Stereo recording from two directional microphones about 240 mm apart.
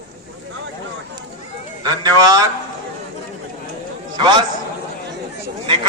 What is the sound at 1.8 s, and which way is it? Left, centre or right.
Speech, centre.